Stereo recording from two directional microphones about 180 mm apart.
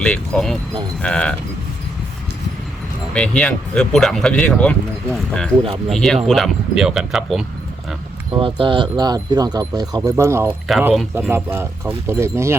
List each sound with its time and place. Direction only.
0.0 s speech: 5° left (ahead or behind)
3.2 s speech: 5° left (ahead or behind)
5.9 s speech: 5° left (ahead or behind)
8.3 s speech: 30° right (ahead or behind)
10.7 s speech: centre (ahead or behind)